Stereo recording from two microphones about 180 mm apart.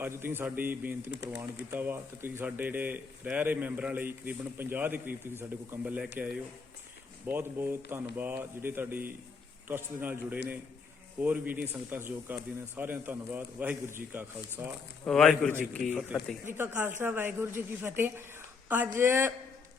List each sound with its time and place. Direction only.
0.0 s speech: 15° right (ahead or behind)
15.0 s a man's voice: centre (ahead or behind)
16.5 s speech: 10° right (ahead or behind)